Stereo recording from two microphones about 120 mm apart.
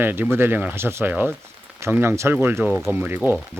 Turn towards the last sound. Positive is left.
turn(degrees=-15)  # may be behind; listen again after turning